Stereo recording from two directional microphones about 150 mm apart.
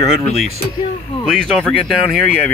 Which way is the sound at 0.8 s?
35° left (ahead or behind).